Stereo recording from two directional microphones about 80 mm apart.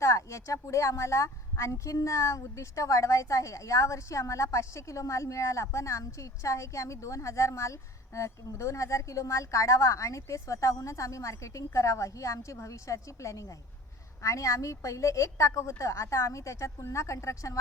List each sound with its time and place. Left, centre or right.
0.0 s speech: left